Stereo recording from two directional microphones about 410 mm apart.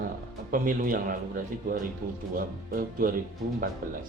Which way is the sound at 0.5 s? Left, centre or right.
Centre.